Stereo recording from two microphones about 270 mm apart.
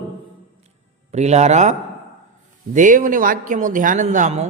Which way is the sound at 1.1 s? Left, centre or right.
Right.